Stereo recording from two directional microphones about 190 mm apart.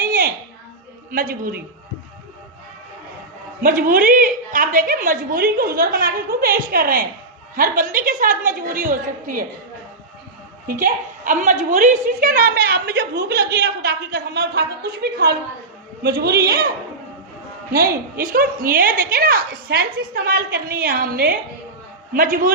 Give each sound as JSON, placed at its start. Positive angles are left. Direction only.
{"t": 1.1, "sound": "a woman's voice", "side_deg": -50}
{"t": 3.6, "sound": "a woman's voice", "side_deg": -45}
{"t": 10.7, "sound": "a woman's voice", "side_deg": -45}
{"t": 17.7, "sound": "a woman's voice", "side_deg": -50}